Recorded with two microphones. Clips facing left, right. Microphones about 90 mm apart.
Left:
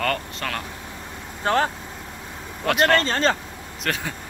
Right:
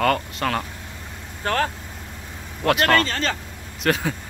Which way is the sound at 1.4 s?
20° left (ahead or behind).